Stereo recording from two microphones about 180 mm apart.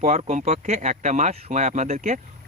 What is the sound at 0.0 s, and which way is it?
Speech, 40° right (ahead or behind).